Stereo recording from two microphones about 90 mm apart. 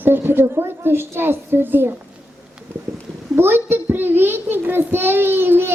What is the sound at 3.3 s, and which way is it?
A child's voice, 25° right (ahead or behind).